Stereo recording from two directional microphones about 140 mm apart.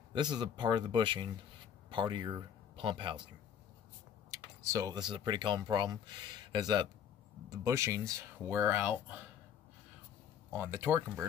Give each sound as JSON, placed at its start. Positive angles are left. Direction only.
{"t": 0.1, "sound": "speech", "side_deg": -30}
{"t": 4.6, "sound": "speech", "side_deg": -25}
{"t": 10.5, "sound": "speech", "side_deg": -15}